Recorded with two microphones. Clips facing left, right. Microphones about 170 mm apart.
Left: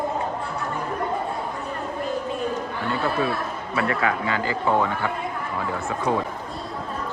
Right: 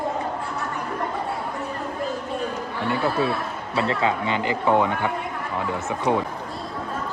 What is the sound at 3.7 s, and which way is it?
Speech, 25° right (ahead or behind).